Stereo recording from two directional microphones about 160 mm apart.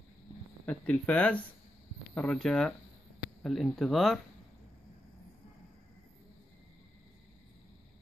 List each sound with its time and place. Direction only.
0.7 s speech: 10° left (ahead or behind)